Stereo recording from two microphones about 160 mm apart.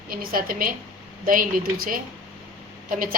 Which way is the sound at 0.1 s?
65° right (ahead or behind).